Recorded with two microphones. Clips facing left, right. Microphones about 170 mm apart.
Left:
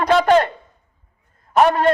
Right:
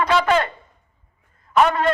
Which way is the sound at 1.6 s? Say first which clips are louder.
Left 3 dB; 40° left (ahead or behind).